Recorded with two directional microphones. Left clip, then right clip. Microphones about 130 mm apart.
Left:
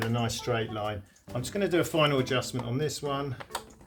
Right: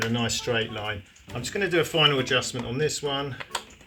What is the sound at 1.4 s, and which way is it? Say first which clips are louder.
Speech: right 3 dB; 90° left.